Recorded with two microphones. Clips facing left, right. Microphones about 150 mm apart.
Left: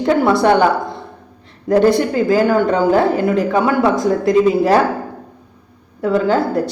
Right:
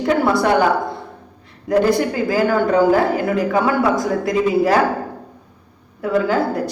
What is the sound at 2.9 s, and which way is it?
A man's voice, 25° left (ahead or behind).